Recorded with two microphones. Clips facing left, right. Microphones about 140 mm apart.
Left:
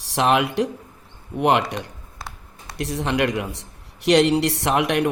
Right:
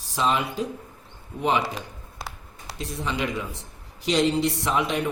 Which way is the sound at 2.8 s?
80° left.